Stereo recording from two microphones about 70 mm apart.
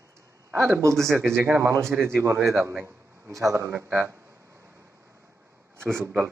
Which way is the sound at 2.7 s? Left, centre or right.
Right.